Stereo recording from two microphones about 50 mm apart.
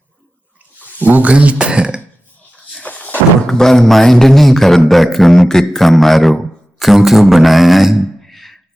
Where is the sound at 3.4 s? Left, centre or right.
Centre.